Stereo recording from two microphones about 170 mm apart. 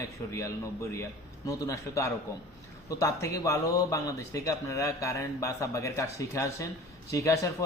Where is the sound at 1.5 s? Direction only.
20° left (ahead or behind).